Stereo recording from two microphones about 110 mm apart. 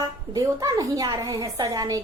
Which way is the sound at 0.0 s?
35° right (ahead or behind).